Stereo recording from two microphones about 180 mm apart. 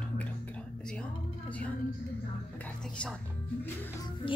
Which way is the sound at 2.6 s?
5° left (ahead or behind).